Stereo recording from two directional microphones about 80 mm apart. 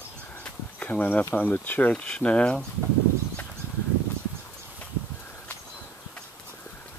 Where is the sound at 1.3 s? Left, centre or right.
Left.